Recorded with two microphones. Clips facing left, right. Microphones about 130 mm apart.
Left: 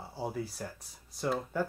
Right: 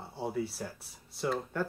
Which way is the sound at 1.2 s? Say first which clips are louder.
Left 1 dB; 5° left (ahead or behind).